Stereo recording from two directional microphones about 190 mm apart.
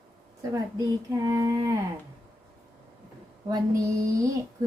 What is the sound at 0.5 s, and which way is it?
Speech, 20° right (ahead or behind).